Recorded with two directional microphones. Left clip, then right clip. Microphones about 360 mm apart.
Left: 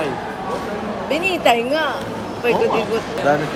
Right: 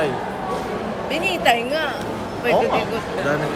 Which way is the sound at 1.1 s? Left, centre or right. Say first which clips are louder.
Left 2 dB; centre.